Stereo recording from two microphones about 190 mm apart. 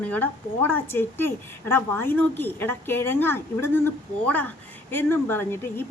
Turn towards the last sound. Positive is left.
turn(degrees=10)  # may be behind; listen again after turning